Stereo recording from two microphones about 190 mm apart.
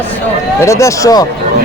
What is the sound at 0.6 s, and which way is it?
Speech, 15° left (ahead or behind).